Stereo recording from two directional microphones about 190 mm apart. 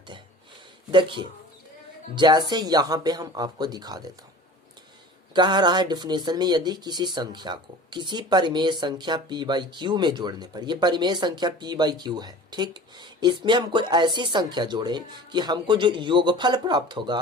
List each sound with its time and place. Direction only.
0.9 s speech: 25° right (ahead or behind)
5.3 s speech: 25° right (ahead or behind)